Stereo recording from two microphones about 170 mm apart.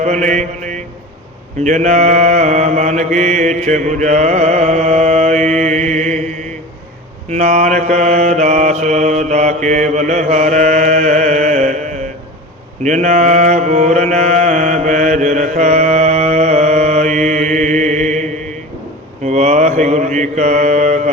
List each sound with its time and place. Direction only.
0.0 s mantra: 45° right (ahead or behind)
7.3 s mantra: 40° right (ahead or behind)
12.8 s mantra: 45° right (ahead or behind)